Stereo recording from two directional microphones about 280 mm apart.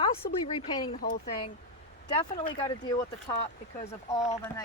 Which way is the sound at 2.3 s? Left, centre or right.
Centre.